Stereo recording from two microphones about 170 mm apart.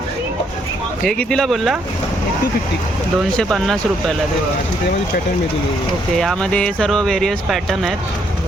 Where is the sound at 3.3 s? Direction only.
5° left (ahead or behind).